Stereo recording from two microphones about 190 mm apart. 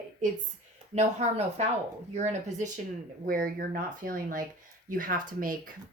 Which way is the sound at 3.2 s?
50° right (ahead or behind).